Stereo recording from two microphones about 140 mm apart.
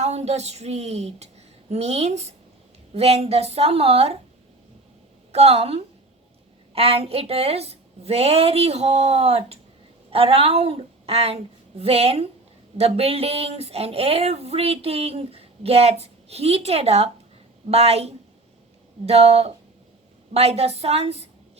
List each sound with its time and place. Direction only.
0.0 s speech: 50° right (ahead or behind)
5.3 s a woman's voice: 45° right (ahead or behind)